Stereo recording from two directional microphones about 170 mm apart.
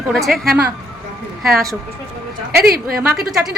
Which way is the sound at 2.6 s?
65° right (ahead or behind).